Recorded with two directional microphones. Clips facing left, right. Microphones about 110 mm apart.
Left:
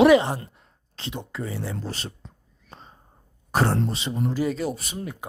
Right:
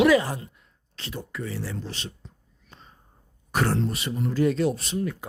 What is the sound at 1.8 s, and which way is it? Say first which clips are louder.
Speech: left 3 dB; 40° left (ahead or behind).